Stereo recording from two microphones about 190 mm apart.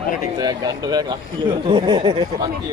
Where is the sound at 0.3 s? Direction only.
20° right (ahead or behind).